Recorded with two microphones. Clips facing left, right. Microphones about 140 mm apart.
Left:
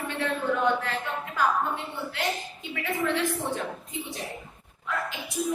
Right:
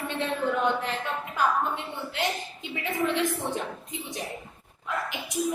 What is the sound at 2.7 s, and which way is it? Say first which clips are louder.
Speech: even; 20° right (ahead or behind).